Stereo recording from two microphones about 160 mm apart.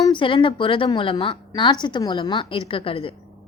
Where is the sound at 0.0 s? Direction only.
30° left (ahead or behind).